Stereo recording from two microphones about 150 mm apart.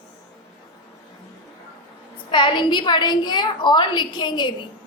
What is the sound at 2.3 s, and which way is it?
A woman's voice, 30° left (ahead or behind).